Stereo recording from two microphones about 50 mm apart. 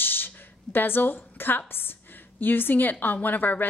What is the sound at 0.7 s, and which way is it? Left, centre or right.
A woman's voice, left.